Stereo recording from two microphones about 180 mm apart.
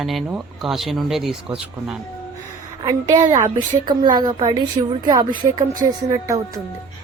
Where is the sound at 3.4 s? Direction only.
25° right (ahead or behind).